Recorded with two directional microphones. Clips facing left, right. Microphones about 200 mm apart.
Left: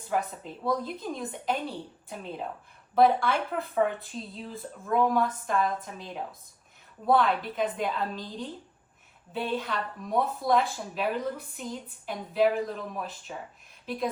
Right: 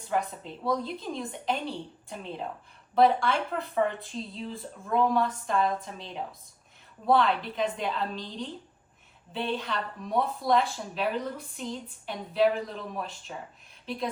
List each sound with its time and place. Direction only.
0.1 s speech: centre (ahead or behind)
7.1 s speech: 5° left (ahead or behind)
8.1 s speech: 50° left (ahead or behind)
9.3 s speech: 5° left (ahead or behind)